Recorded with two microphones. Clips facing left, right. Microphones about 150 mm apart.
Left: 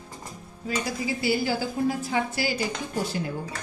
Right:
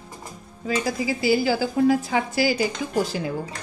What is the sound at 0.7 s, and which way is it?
A woman's voice, 90° right.